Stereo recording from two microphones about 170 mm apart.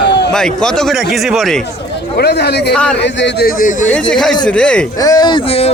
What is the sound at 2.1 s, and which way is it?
Speech, 75° left (ahead or behind).